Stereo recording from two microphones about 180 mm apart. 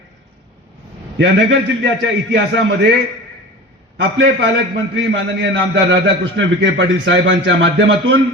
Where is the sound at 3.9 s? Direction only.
90° right.